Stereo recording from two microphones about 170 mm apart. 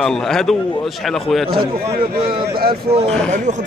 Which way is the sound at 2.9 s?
35° right (ahead or behind).